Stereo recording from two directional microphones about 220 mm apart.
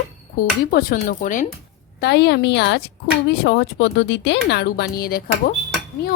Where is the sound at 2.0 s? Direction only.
50° left (ahead or behind).